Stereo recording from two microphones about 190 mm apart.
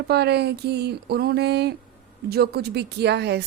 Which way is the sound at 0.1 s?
60° right (ahead or behind).